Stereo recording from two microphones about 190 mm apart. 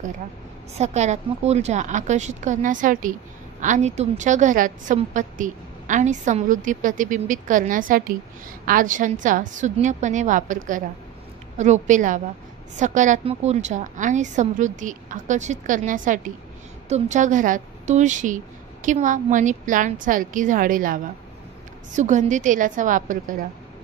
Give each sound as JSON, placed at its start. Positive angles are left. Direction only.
{"t": 0.7, "sound": "a woman's voice", "side_deg": -35}